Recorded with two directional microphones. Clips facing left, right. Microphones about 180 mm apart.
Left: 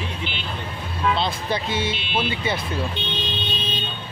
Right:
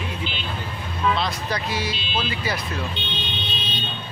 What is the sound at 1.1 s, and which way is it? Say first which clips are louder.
Speech: left 2 dB; 25° left (ahead or behind).